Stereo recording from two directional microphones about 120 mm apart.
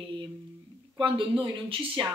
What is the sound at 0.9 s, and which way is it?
Speech, 45° right (ahead or behind).